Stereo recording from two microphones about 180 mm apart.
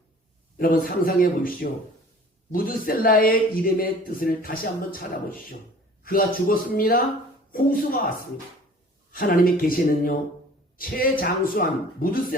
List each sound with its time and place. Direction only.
0.6 s speech: 50° left (ahead or behind)
6.1 s speech: 50° left (ahead or behind)
9.1 s a man's voice: 55° left (ahead or behind)